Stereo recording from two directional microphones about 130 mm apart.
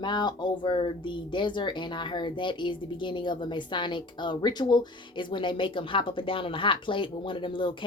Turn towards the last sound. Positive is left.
turn(degrees=40)  # may be behind; listen again after turning